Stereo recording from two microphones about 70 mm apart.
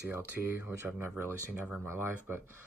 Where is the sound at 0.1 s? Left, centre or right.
Right.